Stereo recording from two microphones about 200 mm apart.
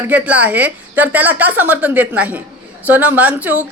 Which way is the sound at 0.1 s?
5° right (ahead or behind).